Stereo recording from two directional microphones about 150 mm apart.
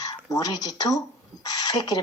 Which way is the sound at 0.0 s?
25° left (ahead or behind).